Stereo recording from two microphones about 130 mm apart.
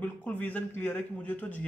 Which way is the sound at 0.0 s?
10° left (ahead or behind).